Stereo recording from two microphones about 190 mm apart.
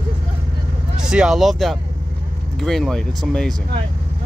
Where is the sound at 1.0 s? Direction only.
5° right (ahead or behind).